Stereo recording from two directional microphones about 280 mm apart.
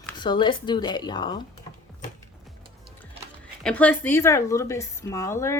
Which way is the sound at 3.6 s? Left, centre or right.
Centre.